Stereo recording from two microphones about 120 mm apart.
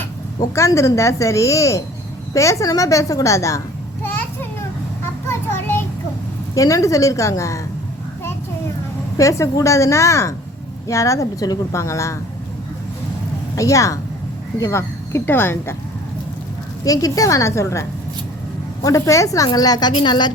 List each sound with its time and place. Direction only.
0.5 s a woman's voice: 25° left (ahead or behind)
4.0 s children playing: 15° left (ahead or behind)
5.3 s a sound: 20° left (ahead or behind)
6.5 s a woman's voice: 30° left (ahead or behind)
9.1 s a woman's voice: 25° left (ahead or behind)
13.6 s a woman's voice: 25° left (ahead or behind)
16.8 s a woman's voice: 30° left (ahead or behind)